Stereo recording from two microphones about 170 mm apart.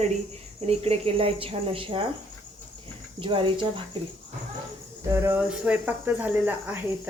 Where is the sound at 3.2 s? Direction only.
30° right (ahead or behind).